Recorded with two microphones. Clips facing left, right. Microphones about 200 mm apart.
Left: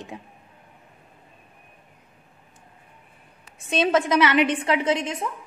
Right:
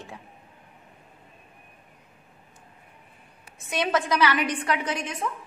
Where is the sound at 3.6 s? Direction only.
25° left (ahead or behind).